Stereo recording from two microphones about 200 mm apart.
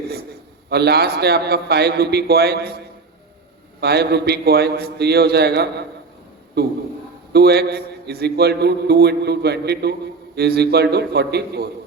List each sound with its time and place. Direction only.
0.7 s a man's voice: 55° right (ahead or behind)
3.8 s a man's voice: 55° right (ahead or behind)